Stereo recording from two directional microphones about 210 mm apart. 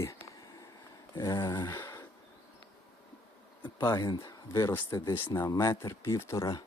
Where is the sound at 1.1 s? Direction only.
15° left (ahead or behind).